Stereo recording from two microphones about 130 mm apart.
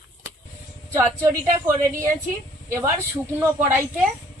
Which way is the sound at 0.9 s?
20° right (ahead or behind).